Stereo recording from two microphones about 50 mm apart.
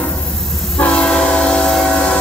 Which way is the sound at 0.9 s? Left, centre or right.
Centre.